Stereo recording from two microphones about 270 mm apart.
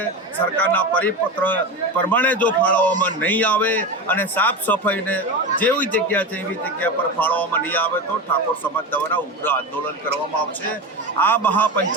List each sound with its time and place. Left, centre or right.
0.5 s a man's voice: centre
11.2 s a man's voice: centre